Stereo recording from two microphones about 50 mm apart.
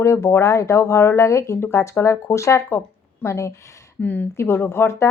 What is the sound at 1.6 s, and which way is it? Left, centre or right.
Speech, left.